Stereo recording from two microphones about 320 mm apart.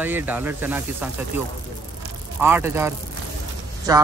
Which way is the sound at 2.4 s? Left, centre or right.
Centre.